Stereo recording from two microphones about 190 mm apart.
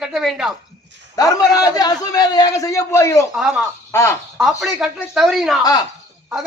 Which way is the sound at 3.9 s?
15° left (ahead or behind).